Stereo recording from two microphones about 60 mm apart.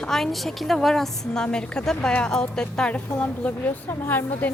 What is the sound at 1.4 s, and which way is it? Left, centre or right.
A woman's voice, centre.